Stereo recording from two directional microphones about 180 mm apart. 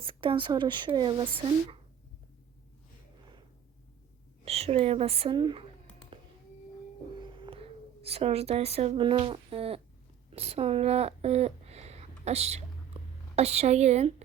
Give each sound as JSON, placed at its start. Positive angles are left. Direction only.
{"t": 0.0, "sound": "speech", "side_deg": -30}
{"t": 4.4, "sound": "a woman's voice", "side_deg": -35}
{"t": 7.2, "sound": "speech", "side_deg": -25}
{"t": 12.9, "sound": "whispering", "side_deg": -35}
{"t": 13.3, "sound": "a woman's voice", "side_deg": -35}